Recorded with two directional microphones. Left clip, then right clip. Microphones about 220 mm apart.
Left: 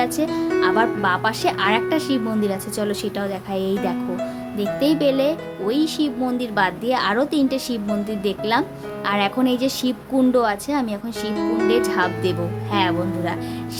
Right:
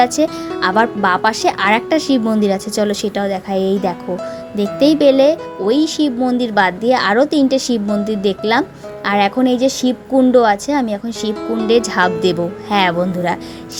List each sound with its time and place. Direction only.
0.0 s a woman's voice: 25° right (ahead or behind)